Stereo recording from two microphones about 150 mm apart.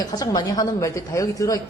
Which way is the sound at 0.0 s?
25° left (ahead or behind).